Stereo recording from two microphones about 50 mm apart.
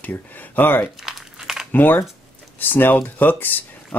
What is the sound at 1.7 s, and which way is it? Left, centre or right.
Speech, left.